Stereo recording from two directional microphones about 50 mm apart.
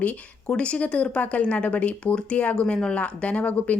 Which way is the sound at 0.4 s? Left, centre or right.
Left.